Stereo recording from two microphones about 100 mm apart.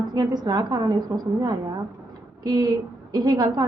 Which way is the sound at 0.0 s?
40° right (ahead or behind).